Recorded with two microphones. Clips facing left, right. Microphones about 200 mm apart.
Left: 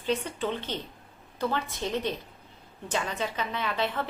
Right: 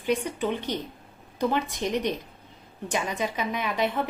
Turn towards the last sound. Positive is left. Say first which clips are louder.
# right 3 dB
turn(degrees=-15)  # may be behind; listen again after turning